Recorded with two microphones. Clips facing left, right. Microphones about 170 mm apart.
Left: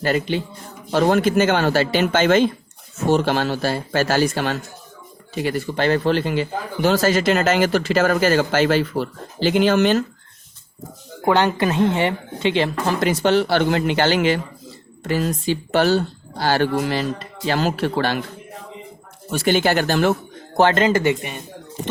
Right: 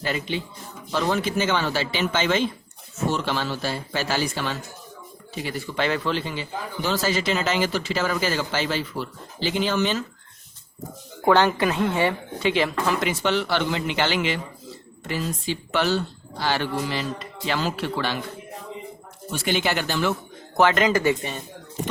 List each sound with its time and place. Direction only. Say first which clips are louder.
0.0 s speech: left 7 dB; 50° left (ahead or behind)
5.7 s a woman's voice: left 5 dB; 40° left (ahead or behind)
6.1 s speech: left 8 dB; 60° left (ahead or behind)
11.3 s a woman's voice: left 1 dB; 15° left (ahead or behind); by 18.2 s 50° left (ahead or behind)
19.3 s speech: left 6 dB; 45° left (ahead or behind)
20.6 s speech: left 3 dB; 30° left (ahead or behind)